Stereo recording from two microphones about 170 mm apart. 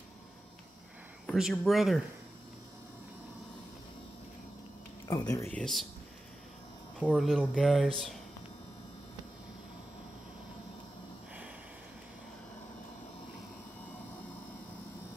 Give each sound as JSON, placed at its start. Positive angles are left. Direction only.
{"t": 1.2, "sound": "speech", "side_deg": 0}
{"t": 5.0, "sound": "speech", "side_deg": 15}
{"t": 5.6, "sound": "speech", "side_deg": 0}
{"t": 7.0, "sound": "speech", "side_deg": 5}